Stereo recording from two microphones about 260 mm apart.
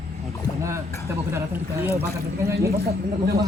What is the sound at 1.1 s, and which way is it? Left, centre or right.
Speech, centre.